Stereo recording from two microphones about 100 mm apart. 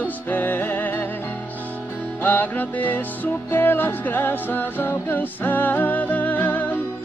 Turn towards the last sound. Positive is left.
turn(degrees=15)  # may be behind; listen again after turning